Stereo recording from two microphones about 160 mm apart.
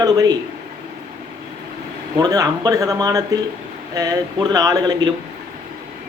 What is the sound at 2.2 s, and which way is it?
Speech, 25° right (ahead or behind).